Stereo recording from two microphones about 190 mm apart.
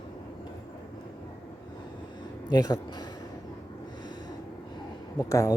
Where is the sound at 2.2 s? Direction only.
20° left (ahead or behind).